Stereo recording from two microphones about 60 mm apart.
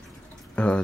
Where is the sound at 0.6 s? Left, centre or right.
Centre.